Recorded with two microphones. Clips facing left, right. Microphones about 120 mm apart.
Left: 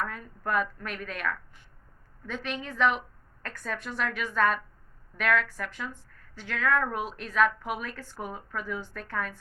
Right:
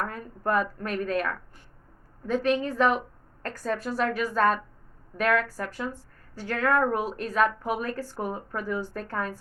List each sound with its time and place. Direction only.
0.0 s a woman's voice: 40° right (ahead or behind)